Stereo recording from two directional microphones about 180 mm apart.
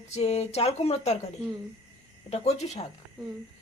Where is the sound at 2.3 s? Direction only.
35° left (ahead or behind).